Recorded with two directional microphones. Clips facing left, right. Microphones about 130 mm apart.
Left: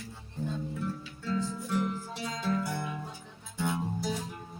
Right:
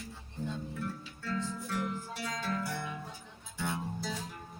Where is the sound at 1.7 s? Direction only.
20° left (ahead or behind).